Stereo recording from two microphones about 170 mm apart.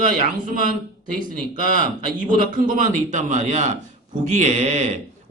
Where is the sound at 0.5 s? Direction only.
50° right (ahead or behind).